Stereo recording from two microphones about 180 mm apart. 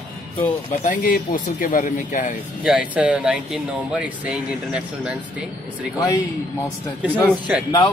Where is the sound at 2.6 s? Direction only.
5° right (ahead or behind).